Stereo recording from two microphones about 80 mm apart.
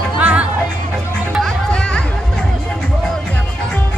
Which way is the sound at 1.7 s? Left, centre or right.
Centre.